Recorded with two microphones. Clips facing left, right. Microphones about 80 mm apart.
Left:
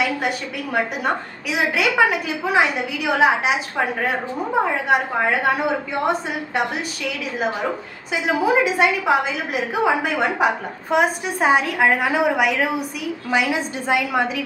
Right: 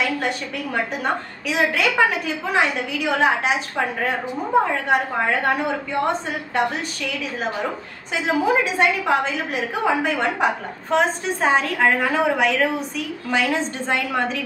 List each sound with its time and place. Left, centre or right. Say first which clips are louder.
1.0 s a woman's voice: left 1 dB; centre
8.1 s a woman's voice: left 1 dB; centre